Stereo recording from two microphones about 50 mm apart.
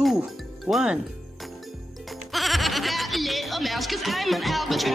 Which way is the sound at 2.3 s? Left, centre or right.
Centre.